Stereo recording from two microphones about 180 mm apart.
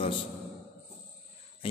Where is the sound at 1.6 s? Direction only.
30° left (ahead or behind).